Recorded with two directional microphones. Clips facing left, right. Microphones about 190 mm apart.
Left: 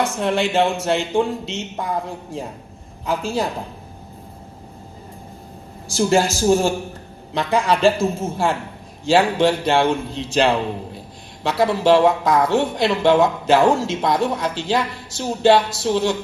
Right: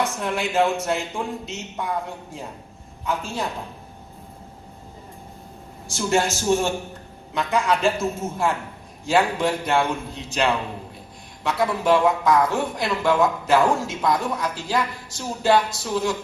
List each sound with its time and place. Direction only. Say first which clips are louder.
0.0 s speech: left 5 dB; 30° left (ahead or behind)
5.9 s a man's voice: left 5 dB; 35° left (ahead or behind)